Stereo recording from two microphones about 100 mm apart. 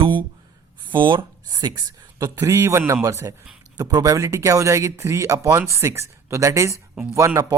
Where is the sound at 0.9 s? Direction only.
55° right (ahead or behind).